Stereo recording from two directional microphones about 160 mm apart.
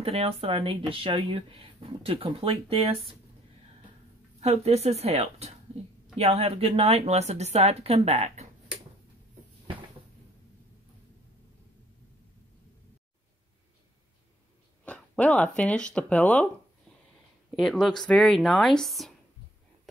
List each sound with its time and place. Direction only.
0.0 s speech: 40° right (ahead or behind)
4.4 s speech: 40° right (ahead or behind)
14.9 s speech: 10° left (ahead or behind)
17.6 s speech: centre (ahead or behind)